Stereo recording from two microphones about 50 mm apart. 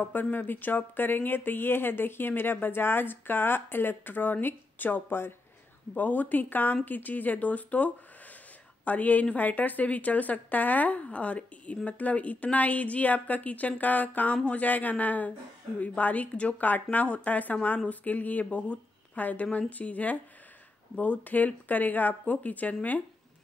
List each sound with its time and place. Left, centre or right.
0.0 s a woman's voice: left
5.9 s a woman's voice: left